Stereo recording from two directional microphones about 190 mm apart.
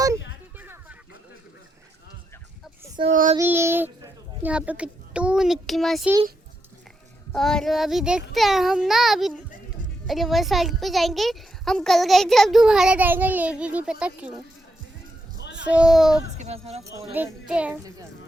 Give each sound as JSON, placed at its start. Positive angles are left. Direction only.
{"t": 0.6, "sound": "a sound", "side_deg": -10}
{"t": 3.1, "sound": "speech", "side_deg": -40}
{"t": 3.3, "sound": "a child's voice", "side_deg": -10}
{"t": 7.3, "sound": "a child's voice", "side_deg": 5}
{"t": 15.6, "sound": "a child's voice", "side_deg": -5}
{"t": 16.4, "sound": "speech", "side_deg": -35}
{"t": 17.2, "sound": "a child's voice", "side_deg": -5}